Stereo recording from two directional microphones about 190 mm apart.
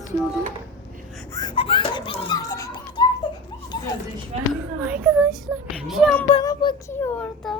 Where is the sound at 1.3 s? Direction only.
25° left (ahead or behind).